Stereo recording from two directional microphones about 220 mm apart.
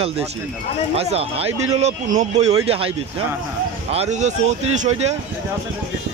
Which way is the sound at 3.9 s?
30° right (ahead or behind).